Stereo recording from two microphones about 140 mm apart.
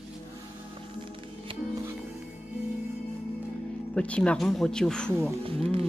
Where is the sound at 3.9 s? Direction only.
10° left (ahead or behind).